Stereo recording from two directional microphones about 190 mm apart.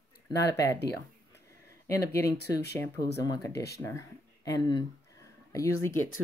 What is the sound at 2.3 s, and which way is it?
Speech, 60° left (ahead or behind).